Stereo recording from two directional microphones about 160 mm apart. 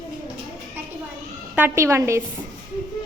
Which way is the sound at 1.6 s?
15° right (ahead or behind).